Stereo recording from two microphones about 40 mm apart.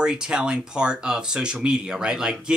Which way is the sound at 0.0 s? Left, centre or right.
Centre.